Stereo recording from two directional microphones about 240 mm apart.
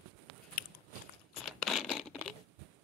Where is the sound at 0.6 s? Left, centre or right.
Left.